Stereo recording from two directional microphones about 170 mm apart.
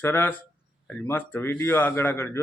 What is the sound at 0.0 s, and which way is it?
Speech, 10° left (ahead or behind).